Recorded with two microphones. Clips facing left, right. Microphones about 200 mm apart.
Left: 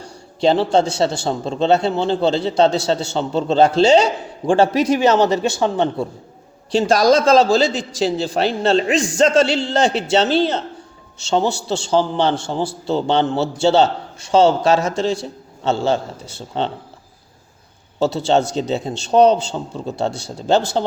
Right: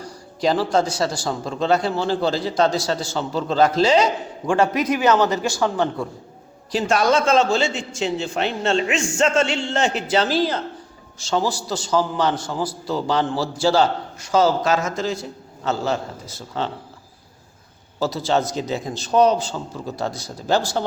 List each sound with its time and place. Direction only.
0.0 s a man's voice: 25° left (ahead or behind)
18.0 s a man's voice: 30° left (ahead or behind)